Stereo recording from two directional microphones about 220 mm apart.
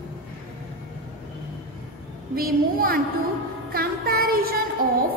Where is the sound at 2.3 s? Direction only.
40° right (ahead or behind).